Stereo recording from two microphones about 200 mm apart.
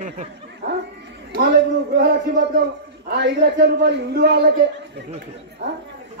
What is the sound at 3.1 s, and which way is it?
A man's voice, 55° right (ahead or behind).